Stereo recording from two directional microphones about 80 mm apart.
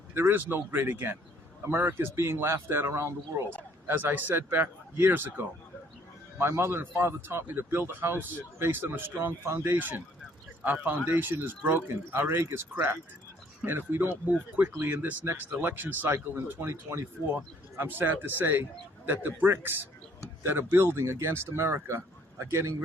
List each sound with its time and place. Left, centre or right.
0.1 s speech: right
3.8 s speech: right